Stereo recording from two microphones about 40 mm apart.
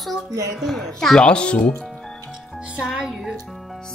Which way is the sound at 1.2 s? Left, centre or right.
Left.